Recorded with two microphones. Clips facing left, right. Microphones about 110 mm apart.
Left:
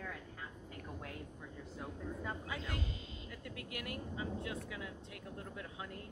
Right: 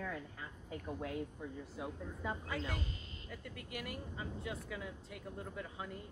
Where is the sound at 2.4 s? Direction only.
5° left (ahead or behind).